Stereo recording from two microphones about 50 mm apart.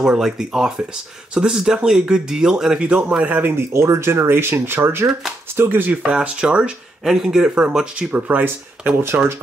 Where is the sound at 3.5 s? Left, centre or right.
Right.